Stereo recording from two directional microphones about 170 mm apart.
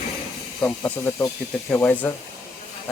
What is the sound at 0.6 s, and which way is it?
Speech, 10° left (ahead or behind).